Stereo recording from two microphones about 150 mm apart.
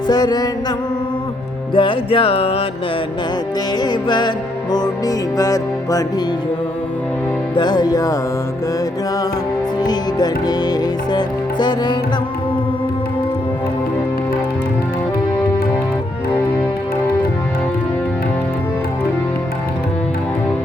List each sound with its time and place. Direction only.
0.1 s music: 25° left (ahead or behind)
1.7 s music: 35° left (ahead or behind)
3.8 s music: 30° left (ahead or behind)
7.5 s music: 30° left (ahead or behind)
9.8 s music: 25° left (ahead or behind)